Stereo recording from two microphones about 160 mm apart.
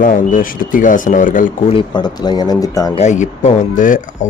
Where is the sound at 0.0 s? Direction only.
60° left (ahead or behind).